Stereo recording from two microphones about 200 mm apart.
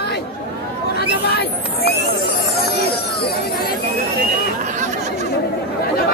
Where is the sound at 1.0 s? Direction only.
55° left (ahead or behind).